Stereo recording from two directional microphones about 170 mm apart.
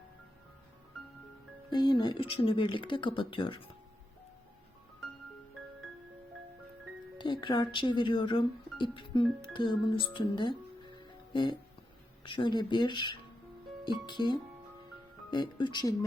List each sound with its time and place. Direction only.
1.7 s speech: 25° left (ahead or behind)
7.2 s speech: 25° left (ahead or behind)
12.2 s speech: 30° left (ahead or behind)